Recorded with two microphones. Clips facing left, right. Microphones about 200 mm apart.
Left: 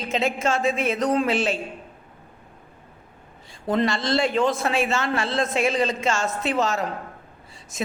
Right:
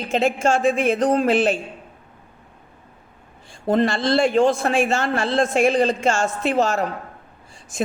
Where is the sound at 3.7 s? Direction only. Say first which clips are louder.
Right 4 dB; 50° right (ahead or behind).